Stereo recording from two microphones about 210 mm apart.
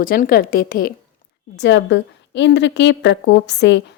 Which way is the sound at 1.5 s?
60° left (ahead or behind).